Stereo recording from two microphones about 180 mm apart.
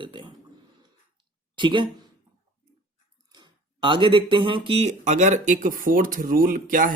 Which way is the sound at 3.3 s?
25° right (ahead or behind).